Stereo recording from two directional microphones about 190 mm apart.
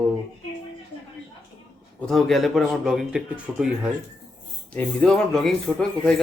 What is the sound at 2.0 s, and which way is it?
Speech, centre (ahead or behind).